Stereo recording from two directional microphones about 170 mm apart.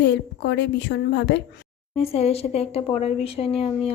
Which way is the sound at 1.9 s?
35° left (ahead or behind).